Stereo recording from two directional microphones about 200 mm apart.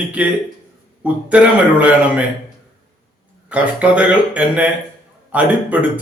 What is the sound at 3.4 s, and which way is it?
A man's voice, 5° right (ahead or behind).